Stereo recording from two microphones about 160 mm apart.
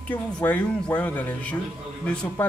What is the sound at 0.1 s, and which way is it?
Speech, 10° left (ahead or behind).